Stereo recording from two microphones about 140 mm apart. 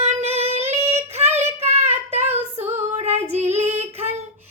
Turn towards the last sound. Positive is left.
turn(degrees=-50)  # may be behind; listen again after turning